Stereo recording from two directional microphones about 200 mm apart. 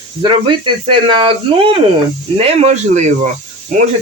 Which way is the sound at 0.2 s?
25° right (ahead or behind).